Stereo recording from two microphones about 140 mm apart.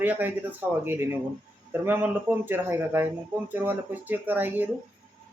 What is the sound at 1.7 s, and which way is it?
Speech, 15° right (ahead or behind).